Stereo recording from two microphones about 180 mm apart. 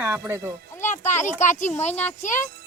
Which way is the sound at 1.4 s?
45° left (ahead or behind).